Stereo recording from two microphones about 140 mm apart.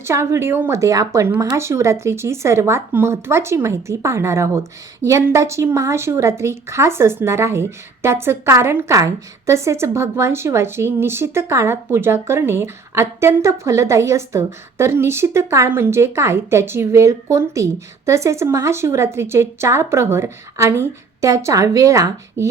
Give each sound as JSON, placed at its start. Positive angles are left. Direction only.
{"t": 0.0, "sound": "a woman's voice", "side_deg": -20}